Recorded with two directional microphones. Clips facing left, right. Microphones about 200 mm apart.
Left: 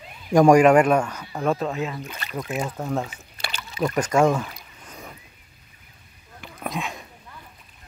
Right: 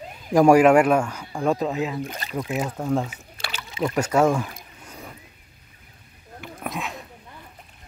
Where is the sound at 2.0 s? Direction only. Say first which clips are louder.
Right 4 dB; 40° right (ahead or behind).